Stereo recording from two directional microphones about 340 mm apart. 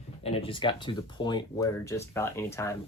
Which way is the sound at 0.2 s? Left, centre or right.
Centre.